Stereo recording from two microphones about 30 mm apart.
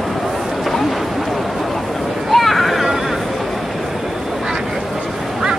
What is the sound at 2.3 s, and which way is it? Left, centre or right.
Vehicle, centre.